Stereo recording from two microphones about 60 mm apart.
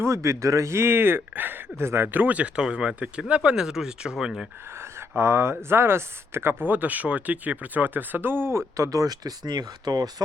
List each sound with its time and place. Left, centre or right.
0.0 s speech: right
2.6 s speech: centre
3.6 s speech: centre
4.7 s speech: right
6.7 s speech: right
8.7 s speech: right